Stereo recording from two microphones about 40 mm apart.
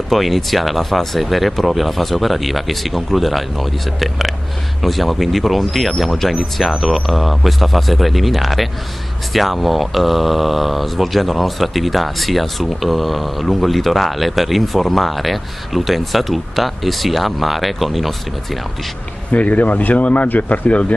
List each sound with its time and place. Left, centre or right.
0.1 s speech: centre
19.3 s speech: left